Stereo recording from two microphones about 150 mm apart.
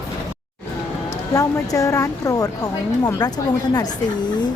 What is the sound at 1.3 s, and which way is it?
A woman's voice, 20° left (ahead or behind).